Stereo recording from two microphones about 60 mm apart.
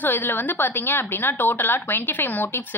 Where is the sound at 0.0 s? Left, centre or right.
Left.